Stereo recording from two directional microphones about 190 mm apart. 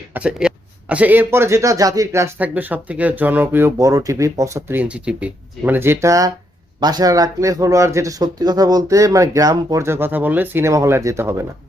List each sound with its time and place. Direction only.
0.1 s speech: 5° right (ahead or behind)